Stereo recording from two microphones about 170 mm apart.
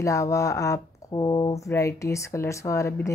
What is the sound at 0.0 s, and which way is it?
Speech, 20° left (ahead or behind).